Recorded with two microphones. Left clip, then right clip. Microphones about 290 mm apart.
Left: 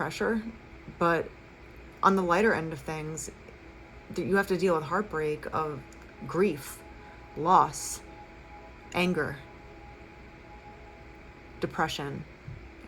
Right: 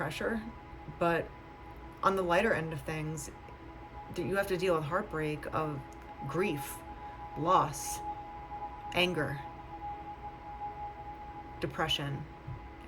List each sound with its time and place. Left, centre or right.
0.0 s speech: centre
11.6 s speech: centre